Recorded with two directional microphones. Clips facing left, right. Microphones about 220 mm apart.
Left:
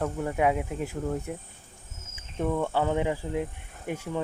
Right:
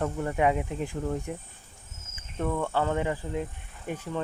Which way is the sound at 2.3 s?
10° left (ahead or behind).